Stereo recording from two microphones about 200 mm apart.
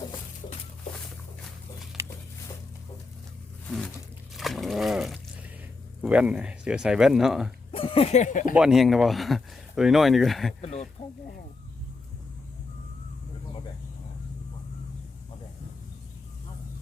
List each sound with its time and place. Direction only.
2.0 s a sound: 15° right (ahead or behind)
3.7 s a sound: centre (ahead or behind)
4.4 s wild animals: centre (ahead or behind)
6.0 s speech: 5° right (ahead or behind)
7.7 s speech: 30° left (ahead or behind)
8.5 s speech: centre (ahead or behind)
10.6 s speech: 30° left (ahead or behind)